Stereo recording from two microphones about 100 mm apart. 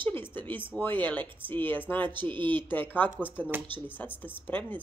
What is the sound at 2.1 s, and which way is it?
Speech, 55° right (ahead or behind).